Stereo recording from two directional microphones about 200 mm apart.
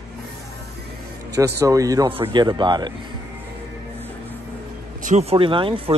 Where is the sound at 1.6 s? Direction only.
15° right (ahead or behind).